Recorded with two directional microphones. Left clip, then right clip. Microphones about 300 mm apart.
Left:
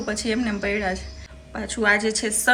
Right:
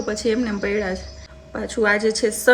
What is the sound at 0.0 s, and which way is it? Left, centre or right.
A woman's voice, centre.